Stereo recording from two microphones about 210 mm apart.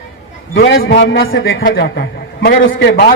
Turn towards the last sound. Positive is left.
turn(degrees=50)  # may be behind; listen again after turning